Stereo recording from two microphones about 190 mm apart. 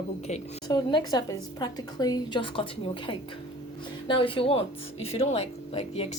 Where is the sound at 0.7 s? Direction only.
20° left (ahead or behind).